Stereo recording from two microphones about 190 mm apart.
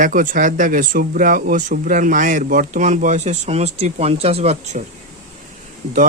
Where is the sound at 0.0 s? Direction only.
45° right (ahead or behind).